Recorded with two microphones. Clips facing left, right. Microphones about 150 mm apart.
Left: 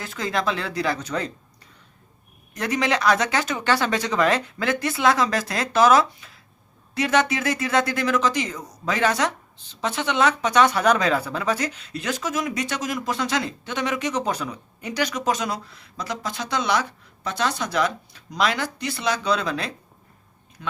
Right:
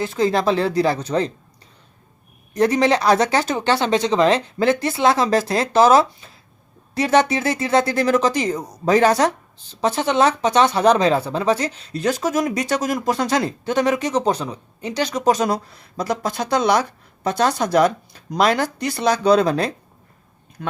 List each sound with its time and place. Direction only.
0.0 s speech: 30° right (ahead or behind)
2.5 s speech: 35° right (ahead or behind)
20.6 s a sound: 50° right (ahead or behind)